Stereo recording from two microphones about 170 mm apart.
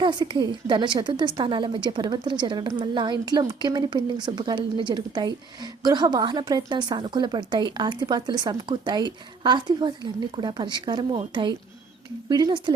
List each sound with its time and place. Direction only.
0.0 s a woman's voice: 25° right (ahead or behind)